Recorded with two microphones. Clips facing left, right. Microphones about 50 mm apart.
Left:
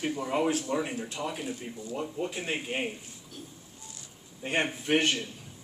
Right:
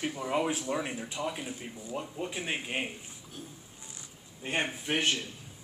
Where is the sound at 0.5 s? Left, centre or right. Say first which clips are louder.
Left 3 dB; centre.